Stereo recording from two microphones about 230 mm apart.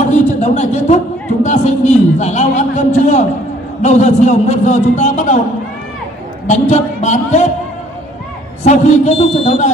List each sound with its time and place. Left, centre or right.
0.1 s a sound: left
1.4 s a man's voice: left
6.5 s speech: left
8.6 s a man's voice: left